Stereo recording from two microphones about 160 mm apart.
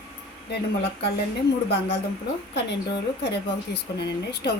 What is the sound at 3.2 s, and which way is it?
Speech, 90° left.